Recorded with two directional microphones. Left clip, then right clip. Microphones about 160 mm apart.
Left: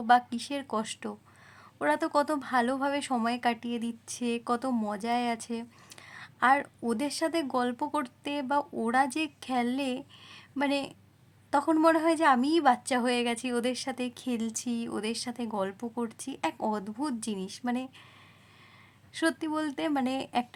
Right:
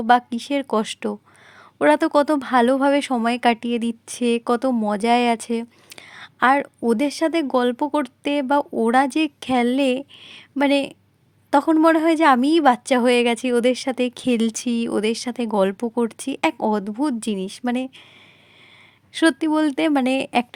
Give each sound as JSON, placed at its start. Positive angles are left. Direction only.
{"t": 0.1, "sound": "a woman's voice", "side_deg": -40}
{"t": 19.1, "sound": "speech", "side_deg": -40}